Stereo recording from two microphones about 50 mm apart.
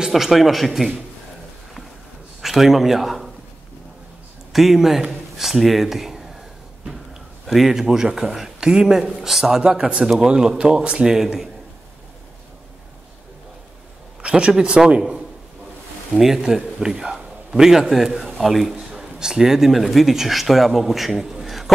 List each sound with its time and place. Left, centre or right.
0.1 s a man's voice: centre
2.4 s speech: centre
4.5 s speech: centre
7.4 s speech: centre
9.6 s speech: centre
14.2 s a man's voice: right; by 21.7 s centre